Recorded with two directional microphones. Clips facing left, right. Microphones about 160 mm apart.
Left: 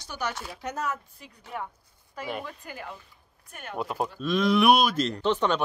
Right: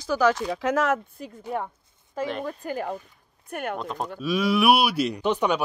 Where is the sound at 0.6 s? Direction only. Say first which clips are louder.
Right 7 dB; 90° right.